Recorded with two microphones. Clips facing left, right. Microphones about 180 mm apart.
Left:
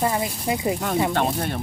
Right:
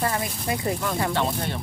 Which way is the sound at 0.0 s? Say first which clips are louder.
Left 3 dB; 15° left (ahead or behind).